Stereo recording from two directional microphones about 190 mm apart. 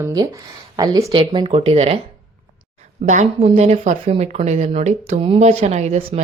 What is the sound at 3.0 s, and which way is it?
Speech, 35° right (ahead or behind).